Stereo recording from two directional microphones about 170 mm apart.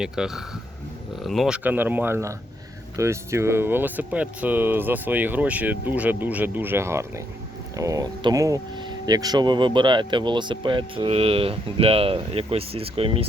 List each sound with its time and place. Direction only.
0.0 s speech: 5° right (ahead or behind); by 13.2 s 35° right (ahead or behind)